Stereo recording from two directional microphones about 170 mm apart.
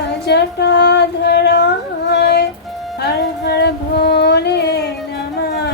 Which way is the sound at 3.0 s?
80° left.